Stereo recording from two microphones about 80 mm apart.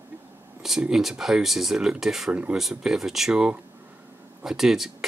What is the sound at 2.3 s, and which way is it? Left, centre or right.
Speech, centre.